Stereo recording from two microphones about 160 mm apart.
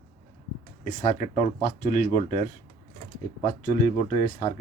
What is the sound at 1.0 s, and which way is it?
Speech, 50° left (ahead or behind).